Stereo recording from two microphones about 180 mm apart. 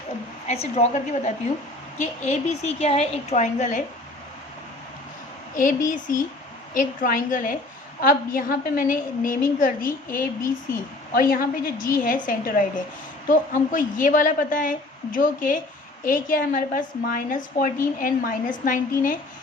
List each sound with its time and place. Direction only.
0.4 s a woman's voice: 35° left (ahead or behind)
5.5 s a woman's voice: 45° left (ahead or behind)